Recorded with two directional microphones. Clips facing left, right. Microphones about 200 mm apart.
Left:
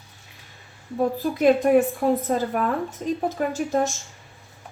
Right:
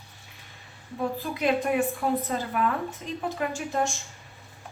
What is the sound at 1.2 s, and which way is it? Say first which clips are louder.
Speech: left 8 dB; 45° left (ahead or behind).